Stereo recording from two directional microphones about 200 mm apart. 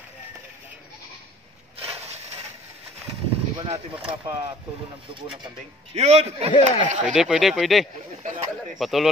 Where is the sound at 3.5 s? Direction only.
20° right (ahead or behind).